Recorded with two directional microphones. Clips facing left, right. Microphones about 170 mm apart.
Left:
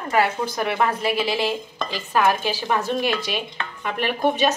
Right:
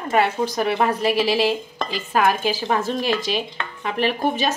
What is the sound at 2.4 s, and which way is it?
Speech, 45° right (ahead or behind).